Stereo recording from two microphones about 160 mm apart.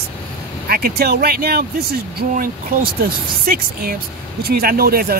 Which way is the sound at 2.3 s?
60° right (ahead or behind).